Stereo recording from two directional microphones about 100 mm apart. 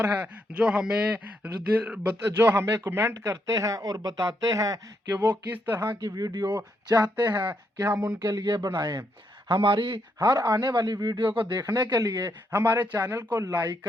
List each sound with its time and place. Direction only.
0.1 s speech: 15° right (ahead or behind); by 4.8 s 35° right (ahead or behind)
5.0 s speech: 15° right (ahead or behind)
6.0 s speech: 40° right (ahead or behind)
9.5 s speech: 60° right (ahead or behind); by 11.2 s 45° right (ahead or behind)
11.3 s speech: 55° right (ahead or behind)
11.6 s speech: 40° right (ahead or behind)
12.5 s speech: 20° right (ahead or behind)